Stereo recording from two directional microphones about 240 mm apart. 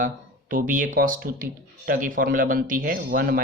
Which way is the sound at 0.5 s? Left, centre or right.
Right.